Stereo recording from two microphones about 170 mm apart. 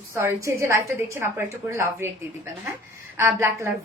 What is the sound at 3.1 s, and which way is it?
Speech, 15° right (ahead or behind).